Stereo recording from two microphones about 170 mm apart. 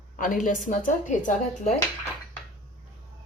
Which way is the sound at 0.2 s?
50° left (ahead or behind).